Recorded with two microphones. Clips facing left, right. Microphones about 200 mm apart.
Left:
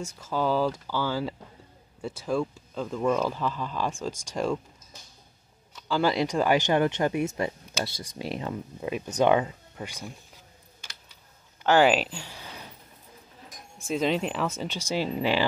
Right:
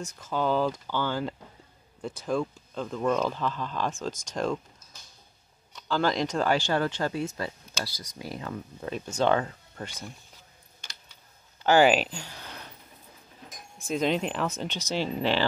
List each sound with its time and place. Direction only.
0.0 s speech: 10° left (ahead or behind)
5.7 s speech: 5° left (ahead or behind)
11.6 s speech: centre (ahead or behind)
13.7 s speech: 5° left (ahead or behind)